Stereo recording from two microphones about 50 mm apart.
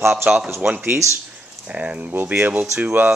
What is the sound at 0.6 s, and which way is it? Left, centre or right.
Speech, right.